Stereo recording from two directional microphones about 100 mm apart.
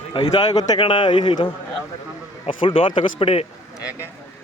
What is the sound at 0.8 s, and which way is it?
Speech, 55° left (ahead or behind).